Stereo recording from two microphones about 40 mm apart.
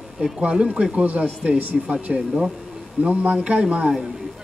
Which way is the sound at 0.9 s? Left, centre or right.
Right.